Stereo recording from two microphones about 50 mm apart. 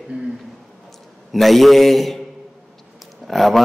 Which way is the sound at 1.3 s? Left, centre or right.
Centre.